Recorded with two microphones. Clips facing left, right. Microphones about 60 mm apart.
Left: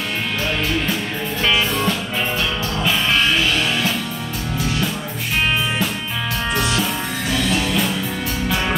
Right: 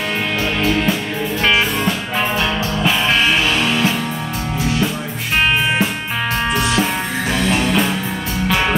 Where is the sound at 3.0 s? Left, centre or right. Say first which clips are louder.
Right 1 dB; right.